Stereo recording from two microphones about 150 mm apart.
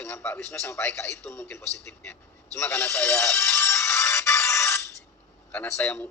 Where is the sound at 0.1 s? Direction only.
15° left (ahead or behind).